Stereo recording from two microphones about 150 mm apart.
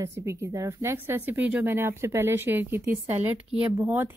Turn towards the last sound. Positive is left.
turn(degrees=-15)  # may be behind; listen again after turning